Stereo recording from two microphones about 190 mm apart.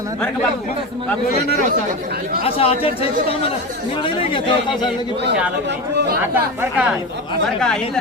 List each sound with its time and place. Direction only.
2.4 s speech: 30° left (ahead or behind)
6.3 s speech: 10° right (ahead or behind)
7.4 s speech: 5° left (ahead or behind)